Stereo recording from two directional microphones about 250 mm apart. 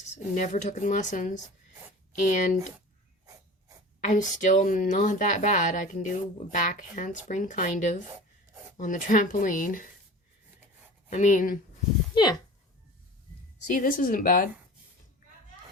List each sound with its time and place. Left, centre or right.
0.0 s speech: left
4.0 s speech: left
11.1 s speech: left
12.1 s speech: centre
13.7 s speech: left